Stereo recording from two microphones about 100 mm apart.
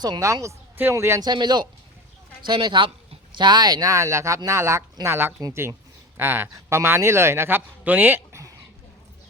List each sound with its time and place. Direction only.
0.0 s speech: 40° right (ahead or behind)
0.8 s speech: 25° right (ahead or behind)
1.2 s a man's voice: 45° right (ahead or behind); by 8.5 s 30° right (ahead or behind)